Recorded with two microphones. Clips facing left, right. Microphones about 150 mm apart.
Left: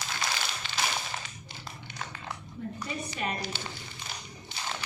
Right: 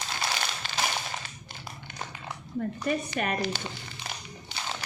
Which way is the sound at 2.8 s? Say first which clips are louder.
Right 5 dB; 60° right (ahead or behind).